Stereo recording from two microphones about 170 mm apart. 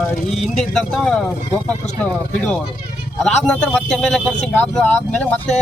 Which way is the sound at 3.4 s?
5° left (ahead or behind).